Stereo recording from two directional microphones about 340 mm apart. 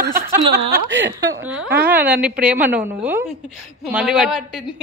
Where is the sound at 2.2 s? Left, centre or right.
Centre.